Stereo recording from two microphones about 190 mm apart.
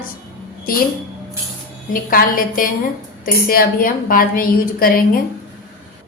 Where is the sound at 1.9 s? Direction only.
50° left (ahead or behind).